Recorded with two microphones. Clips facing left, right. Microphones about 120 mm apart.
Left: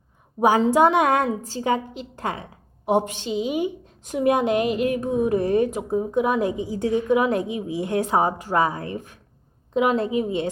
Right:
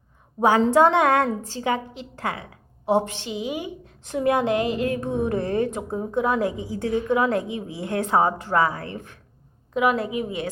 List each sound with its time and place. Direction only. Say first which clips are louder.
0.6 s a woman's voice: right 2 dB; 15° left (ahead or behind)